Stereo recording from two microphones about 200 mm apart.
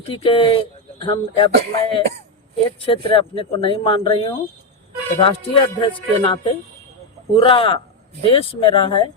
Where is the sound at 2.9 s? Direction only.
25° left (ahead or behind).